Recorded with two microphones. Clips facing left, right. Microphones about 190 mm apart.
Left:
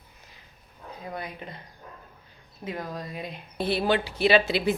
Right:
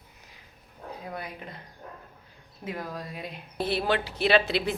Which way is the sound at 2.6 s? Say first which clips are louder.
Left 1 dB; 5° right (ahead or behind).